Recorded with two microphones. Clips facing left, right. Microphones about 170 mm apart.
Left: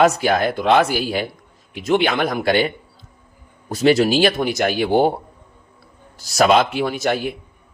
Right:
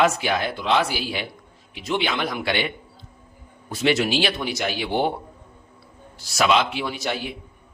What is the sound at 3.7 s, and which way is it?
A man's voice, 40° left (ahead or behind).